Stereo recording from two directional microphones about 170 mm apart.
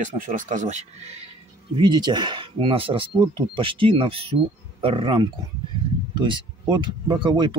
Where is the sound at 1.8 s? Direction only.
25° right (ahead or behind).